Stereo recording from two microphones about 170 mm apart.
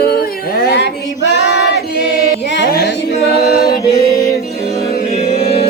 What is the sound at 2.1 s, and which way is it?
A capella, 65° left (ahead or behind).